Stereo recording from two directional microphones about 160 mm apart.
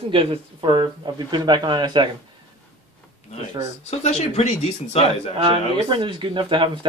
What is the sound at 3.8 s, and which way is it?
Speech, 45° left (ahead or behind).